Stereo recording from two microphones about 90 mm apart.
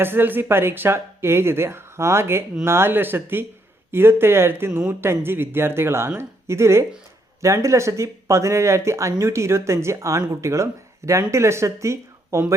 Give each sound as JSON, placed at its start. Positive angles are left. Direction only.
{"t": 0.0, "sound": "speech", "side_deg": -25}